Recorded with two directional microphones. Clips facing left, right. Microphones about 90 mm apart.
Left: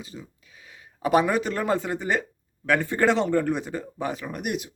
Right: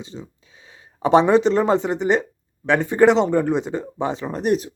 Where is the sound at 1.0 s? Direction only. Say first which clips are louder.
Right 7 dB; 25° right (ahead or behind).